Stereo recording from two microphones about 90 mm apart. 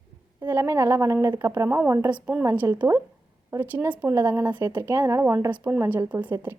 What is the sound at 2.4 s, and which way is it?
Speech, 30° right (ahead or behind).